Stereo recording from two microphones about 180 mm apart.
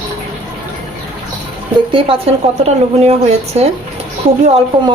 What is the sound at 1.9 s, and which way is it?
A woman's voice, 30° right (ahead or behind).